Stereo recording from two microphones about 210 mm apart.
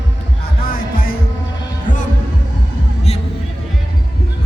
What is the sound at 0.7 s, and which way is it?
Music, 45° left (ahead or behind).